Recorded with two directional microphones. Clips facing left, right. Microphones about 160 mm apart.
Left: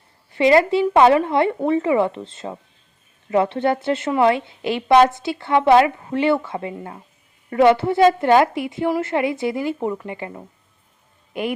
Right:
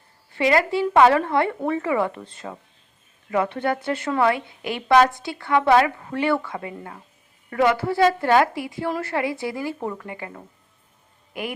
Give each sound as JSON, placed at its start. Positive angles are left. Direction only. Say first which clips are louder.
{"t": 0.3, "sound": "a woman's voice", "louder": "left 5 dB", "side_deg": 25}